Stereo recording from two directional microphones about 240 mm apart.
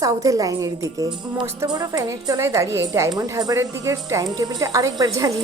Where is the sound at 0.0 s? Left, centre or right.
Centre.